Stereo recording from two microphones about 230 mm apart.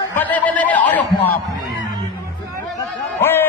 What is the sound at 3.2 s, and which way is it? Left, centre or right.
Music, centre.